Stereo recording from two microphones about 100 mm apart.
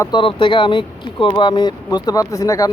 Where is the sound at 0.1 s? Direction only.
60° left (ahead or behind).